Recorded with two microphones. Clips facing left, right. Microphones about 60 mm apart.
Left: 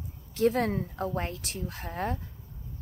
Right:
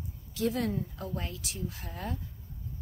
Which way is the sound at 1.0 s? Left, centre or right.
Left.